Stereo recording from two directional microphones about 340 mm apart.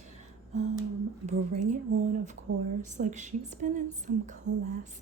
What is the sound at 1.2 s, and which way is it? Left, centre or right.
A woman's voice, right.